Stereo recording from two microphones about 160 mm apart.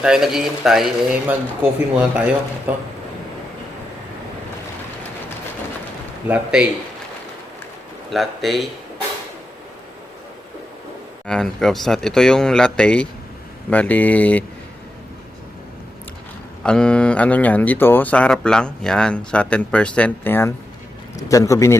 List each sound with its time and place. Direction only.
0.0 s a man's voice: 5° right (ahead or behind)
6.2 s a man's voice: 10° right (ahead or behind)
8.1 s a man's voice: centre (ahead or behind)
11.3 s a man's voice: 5° left (ahead or behind)
16.6 s a man's voice: 5° left (ahead or behind)